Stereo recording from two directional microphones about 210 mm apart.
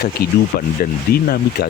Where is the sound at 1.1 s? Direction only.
45° left (ahead or behind).